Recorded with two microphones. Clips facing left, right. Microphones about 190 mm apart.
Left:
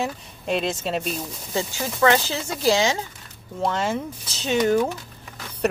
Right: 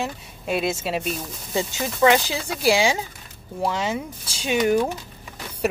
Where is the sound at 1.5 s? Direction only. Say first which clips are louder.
Right 1 dB; 15° right (ahead or behind).